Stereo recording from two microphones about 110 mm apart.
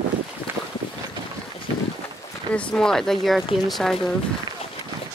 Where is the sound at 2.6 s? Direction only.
5° left (ahead or behind).